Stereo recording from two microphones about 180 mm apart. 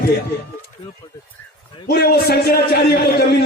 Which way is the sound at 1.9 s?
60° left (ahead or behind).